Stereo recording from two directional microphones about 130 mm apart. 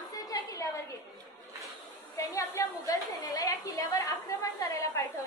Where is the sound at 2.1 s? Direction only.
25° left (ahead or behind).